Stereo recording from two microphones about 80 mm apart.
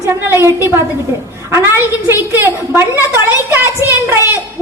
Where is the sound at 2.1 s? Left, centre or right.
Right.